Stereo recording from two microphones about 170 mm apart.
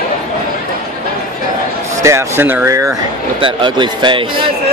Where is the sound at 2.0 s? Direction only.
15° right (ahead or behind).